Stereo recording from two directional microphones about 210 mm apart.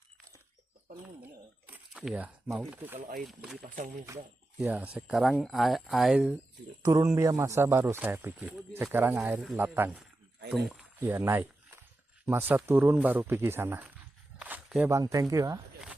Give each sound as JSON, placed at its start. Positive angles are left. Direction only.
{"t": 1.2, "sound": "a sound", "side_deg": -5}
{"t": 3.0, "sound": "speech", "side_deg": -40}
{"t": 3.2, "sound": "speech", "side_deg": 0}
{"t": 4.0, "sound": "speech", "side_deg": -10}
{"t": 6.8, "sound": "speech", "side_deg": -15}
{"t": 14.3, "sound": "walk", "side_deg": -5}